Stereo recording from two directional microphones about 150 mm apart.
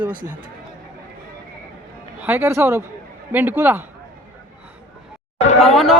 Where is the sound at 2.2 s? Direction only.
15° right (ahead or behind).